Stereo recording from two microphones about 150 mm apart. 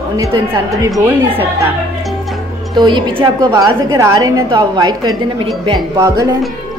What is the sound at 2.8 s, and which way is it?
A woman's voice, 30° right (ahead or behind).